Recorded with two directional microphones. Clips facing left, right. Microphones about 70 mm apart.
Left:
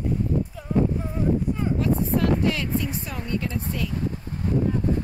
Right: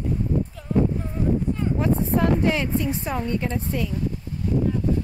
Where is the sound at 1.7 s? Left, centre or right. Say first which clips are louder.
Right 2 dB; right.